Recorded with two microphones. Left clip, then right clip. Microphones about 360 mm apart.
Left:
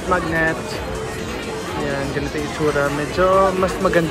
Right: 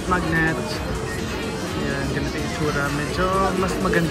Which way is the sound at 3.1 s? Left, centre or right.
Left.